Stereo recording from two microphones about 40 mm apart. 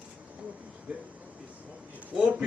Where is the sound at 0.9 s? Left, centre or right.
Right.